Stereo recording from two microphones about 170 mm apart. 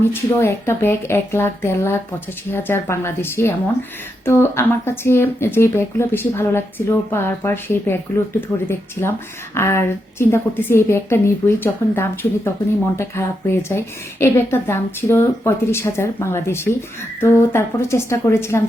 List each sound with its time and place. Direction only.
0.0 s speech: 15° left (ahead or behind)